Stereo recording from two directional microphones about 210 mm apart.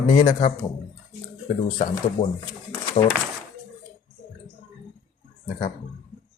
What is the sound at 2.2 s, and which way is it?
Speech, 20° left (ahead or behind).